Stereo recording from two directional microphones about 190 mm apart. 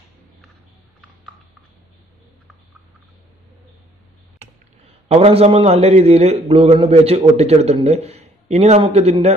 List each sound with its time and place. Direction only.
5.0 s a man's voice: 30° right (ahead or behind)